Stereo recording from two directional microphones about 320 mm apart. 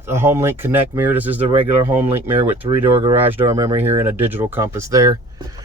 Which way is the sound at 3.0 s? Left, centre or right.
Centre.